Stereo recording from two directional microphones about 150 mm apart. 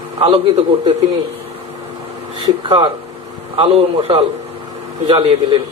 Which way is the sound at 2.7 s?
35° right (ahead or behind).